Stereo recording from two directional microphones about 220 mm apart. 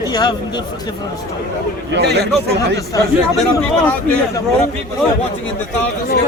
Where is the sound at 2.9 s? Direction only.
15° left (ahead or behind).